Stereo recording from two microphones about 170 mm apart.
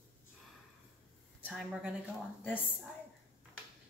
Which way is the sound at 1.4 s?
5° right (ahead or behind).